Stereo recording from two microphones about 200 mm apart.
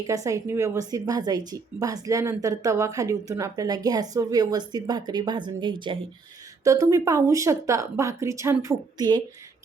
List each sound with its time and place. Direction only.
0.1 s a woman's voice: 15° right (ahead or behind)